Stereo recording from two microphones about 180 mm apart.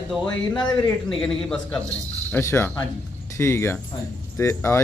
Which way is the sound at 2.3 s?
15° left (ahead or behind).